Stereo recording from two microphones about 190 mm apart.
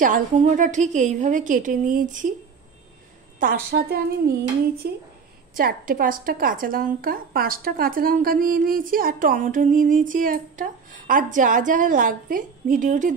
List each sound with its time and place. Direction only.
0.0 s a woman's voice: 40° right (ahead or behind)
3.3 s a woman's voice: 50° right (ahead or behind)